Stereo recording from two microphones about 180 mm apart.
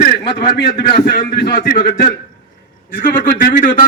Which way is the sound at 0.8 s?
60° left (ahead or behind).